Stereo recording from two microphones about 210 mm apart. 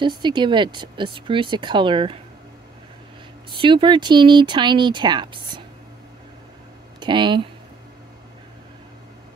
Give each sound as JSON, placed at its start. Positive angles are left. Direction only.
{"t": 0.0, "sound": "speech", "side_deg": -20}
{"t": 3.5, "sound": "speech", "side_deg": -25}
{"t": 7.0, "sound": "speech", "side_deg": -20}